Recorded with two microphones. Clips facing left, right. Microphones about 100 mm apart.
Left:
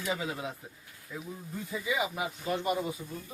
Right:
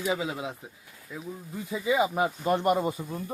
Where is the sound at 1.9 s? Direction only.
30° right (ahead or behind).